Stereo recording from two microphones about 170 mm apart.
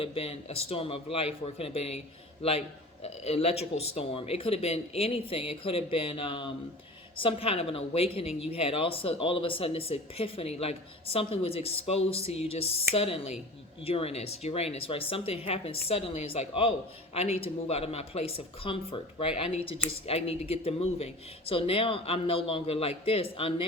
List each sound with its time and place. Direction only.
0.0 s speech: 35° left (ahead or behind)